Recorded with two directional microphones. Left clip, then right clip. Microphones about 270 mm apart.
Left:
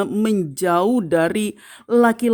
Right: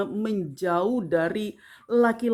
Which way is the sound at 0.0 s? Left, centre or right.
Left.